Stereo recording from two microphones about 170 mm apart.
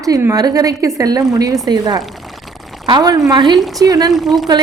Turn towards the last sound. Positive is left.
turn(degrees=0)  # may be behind; listen again after turning